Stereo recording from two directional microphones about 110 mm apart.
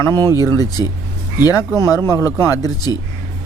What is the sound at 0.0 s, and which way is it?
Speech, 25° left (ahead or behind).